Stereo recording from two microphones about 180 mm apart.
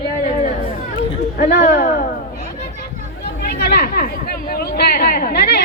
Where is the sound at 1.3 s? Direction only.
55° left (ahead or behind).